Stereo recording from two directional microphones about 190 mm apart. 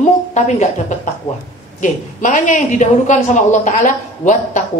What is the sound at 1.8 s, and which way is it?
A woman's voice, 40° left (ahead or behind).